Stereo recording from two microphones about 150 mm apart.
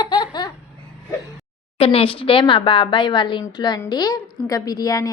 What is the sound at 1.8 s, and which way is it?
A woman's voice, 40° left (ahead or behind).